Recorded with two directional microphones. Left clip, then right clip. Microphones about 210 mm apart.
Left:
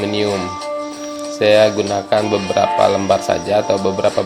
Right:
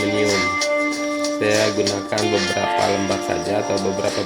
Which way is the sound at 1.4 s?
25° left (ahead or behind).